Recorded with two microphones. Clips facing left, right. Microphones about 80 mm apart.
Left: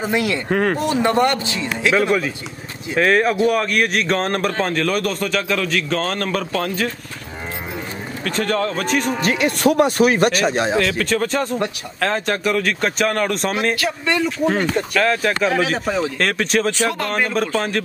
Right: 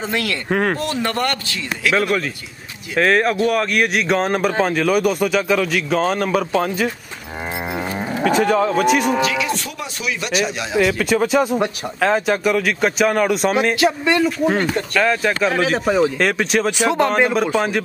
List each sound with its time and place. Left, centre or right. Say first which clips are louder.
0.0 s a man's voice: left 3 dB; centre
0.5 s speech: right 1 dB; centre
0.7 s a man's voice: left 4 dB; left
3.0 s a man's voice: even; centre
8.3 s a man's voice: right 4 dB; centre
9.2 s speech: left 3 dB; left
10.8 s a man's voice: right 2 dB; centre
13.7 s a man's voice: right 5 dB; centre
14.1 s speech: right 2 dB; centre
16.8 s speech: right 5 dB; right
17.3 s a man's voice: right 2 dB; centre